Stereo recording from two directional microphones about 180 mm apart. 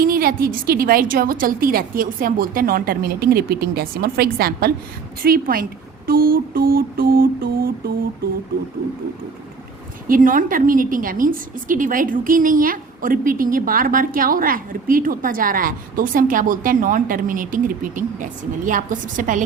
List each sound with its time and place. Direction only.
0.0 s a woman's voice: 55° right (ahead or behind)
10.1 s a woman's voice: 50° right (ahead or behind)